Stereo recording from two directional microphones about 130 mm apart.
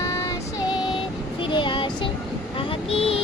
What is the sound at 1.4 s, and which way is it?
Child singing, 40° left (ahead or behind).